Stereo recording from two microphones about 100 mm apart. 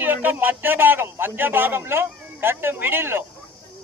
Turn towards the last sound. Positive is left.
turn(degrees=-20)  # may be behind; listen again after turning